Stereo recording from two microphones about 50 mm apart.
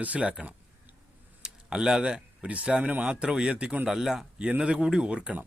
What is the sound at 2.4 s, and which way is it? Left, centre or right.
Speech, right.